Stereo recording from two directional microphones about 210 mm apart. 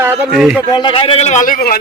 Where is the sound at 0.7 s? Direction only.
20° left (ahead or behind); by 1.8 s 45° left (ahead or behind).